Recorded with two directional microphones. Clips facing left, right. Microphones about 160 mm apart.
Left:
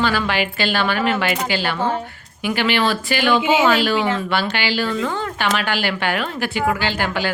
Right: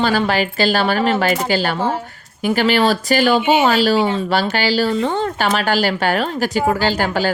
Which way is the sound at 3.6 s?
40° right (ahead or behind).